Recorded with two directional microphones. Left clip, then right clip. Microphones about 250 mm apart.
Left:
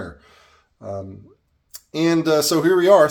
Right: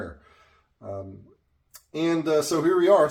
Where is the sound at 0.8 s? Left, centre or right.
Left.